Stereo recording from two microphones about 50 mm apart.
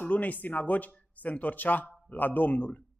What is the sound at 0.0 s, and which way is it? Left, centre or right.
Speech, left.